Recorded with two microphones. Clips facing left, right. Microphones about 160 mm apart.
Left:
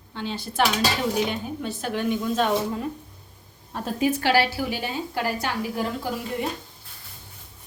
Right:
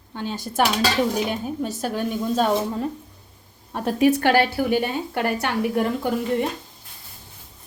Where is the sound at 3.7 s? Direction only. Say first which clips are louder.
Right 6 dB; 65° right (ahead or behind).